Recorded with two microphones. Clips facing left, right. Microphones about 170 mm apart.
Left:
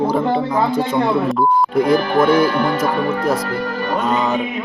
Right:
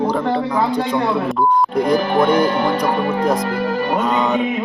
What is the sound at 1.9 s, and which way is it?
Speech, 15° right (ahead or behind).